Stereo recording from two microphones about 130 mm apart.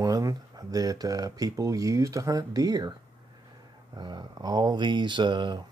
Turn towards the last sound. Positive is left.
turn(degrees=-35)  # may be behind; listen again after turning